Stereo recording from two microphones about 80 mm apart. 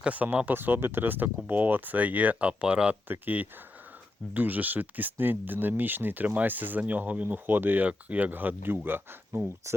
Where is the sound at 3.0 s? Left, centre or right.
Right.